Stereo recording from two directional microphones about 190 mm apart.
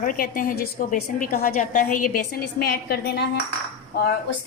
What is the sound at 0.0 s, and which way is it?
A woman's voice, 45° left (ahead or behind).